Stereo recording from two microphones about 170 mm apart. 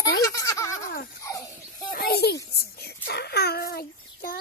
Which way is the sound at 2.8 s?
70° left (ahead or behind).